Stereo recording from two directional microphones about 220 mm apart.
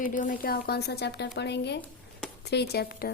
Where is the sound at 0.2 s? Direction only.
40° left (ahead or behind).